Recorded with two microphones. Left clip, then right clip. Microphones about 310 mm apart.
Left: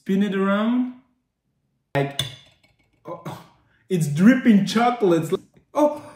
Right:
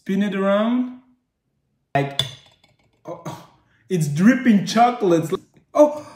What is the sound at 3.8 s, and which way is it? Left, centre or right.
Speech, centre.